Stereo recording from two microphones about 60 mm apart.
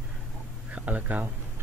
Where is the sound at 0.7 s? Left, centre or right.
Right.